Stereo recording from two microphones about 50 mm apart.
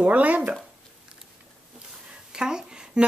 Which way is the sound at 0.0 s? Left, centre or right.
Right.